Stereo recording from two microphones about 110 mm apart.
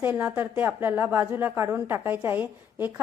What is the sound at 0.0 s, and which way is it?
A woman's voice, 15° right (ahead or behind).